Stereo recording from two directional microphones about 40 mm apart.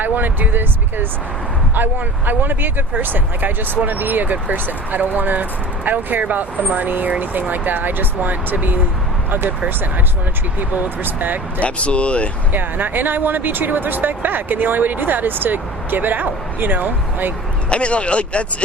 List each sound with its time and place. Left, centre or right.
0.0 s speech: right
10.6 s speech: right
11.6 s speech: left
12.5 s speech: right
17.7 s speech: left